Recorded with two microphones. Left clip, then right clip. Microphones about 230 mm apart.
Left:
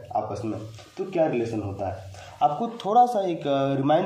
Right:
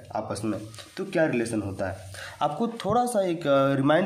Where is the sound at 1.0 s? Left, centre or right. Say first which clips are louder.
Left 1 dB; right.